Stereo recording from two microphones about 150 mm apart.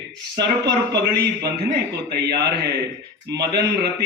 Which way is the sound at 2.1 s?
90° right.